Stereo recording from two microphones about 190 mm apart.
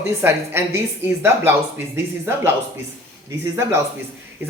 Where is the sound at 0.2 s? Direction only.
10° right (ahead or behind).